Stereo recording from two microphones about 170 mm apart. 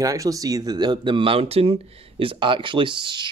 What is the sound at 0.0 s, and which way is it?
Speech, 20° right (ahead or behind).